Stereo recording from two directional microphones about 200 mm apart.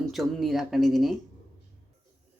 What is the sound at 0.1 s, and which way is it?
Speech, centre (ahead or behind).